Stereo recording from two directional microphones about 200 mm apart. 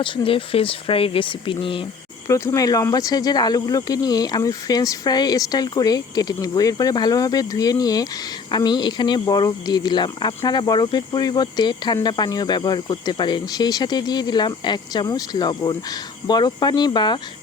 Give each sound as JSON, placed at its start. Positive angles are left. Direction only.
{"t": 0.0, "sound": "speech", "side_deg": 25}